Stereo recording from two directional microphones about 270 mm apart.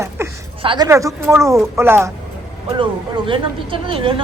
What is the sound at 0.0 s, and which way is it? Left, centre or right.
Speech, centre.